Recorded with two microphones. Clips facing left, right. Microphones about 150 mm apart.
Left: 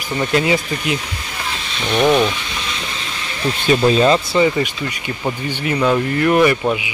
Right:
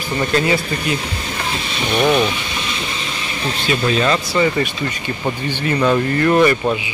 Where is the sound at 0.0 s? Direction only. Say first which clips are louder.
Even; 15° left (ahead or behind).